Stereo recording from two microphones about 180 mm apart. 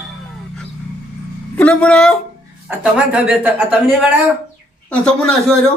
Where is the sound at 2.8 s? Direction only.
5° right (ahead or behind).